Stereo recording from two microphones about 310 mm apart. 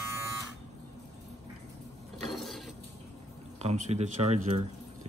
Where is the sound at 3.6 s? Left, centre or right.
Right.